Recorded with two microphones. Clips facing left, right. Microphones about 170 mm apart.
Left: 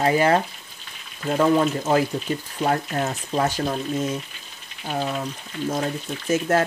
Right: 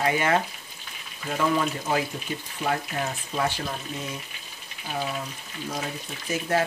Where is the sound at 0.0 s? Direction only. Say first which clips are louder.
Left 5 dB; 35° left (ahead or behind).